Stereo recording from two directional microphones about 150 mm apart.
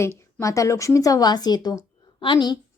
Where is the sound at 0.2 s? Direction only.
20° left (ahead or behind).